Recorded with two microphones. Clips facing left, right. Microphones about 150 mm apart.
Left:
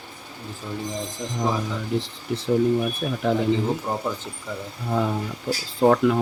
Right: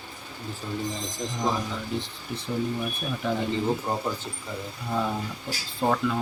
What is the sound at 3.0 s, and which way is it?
Speech, 50° left (ahead or behind).